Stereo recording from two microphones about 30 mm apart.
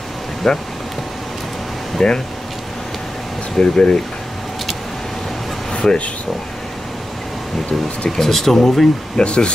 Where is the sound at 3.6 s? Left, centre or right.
Left.